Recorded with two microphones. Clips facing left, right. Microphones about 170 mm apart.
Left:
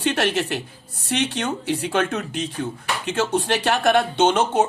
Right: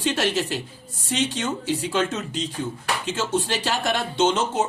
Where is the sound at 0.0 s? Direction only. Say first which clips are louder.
Left 2 dB; 60° left (ahead or behind).